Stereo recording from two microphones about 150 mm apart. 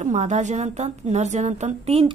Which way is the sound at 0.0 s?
50° right (ahead or behind).